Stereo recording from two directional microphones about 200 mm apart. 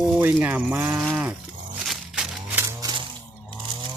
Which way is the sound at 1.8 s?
Centre (ahead or behind).